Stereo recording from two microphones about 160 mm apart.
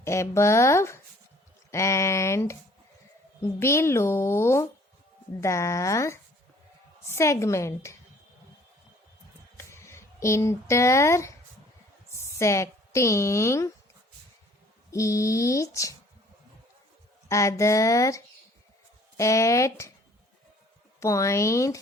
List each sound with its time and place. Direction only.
0.0 s speech: 15° left (ahead or behind)
9.6 s speech: 15° left (ahead or behind)
12.4 s a woman's voice: 20° left (ahead or behind)
14.8 s a woman's voice: 20° left (ahead or behind)
17.2 s a woman's voice: 20° left (ahead or behind)
21.0 s a woman's voice: 20° left (ahead or behind)